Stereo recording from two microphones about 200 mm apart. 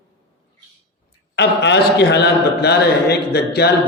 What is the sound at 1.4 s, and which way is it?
A man's voice, 60° left (ahead or behind).